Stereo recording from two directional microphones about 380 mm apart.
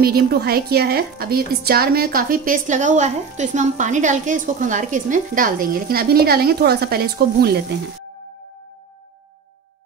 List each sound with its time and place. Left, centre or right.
0.0 s a woman's voice: right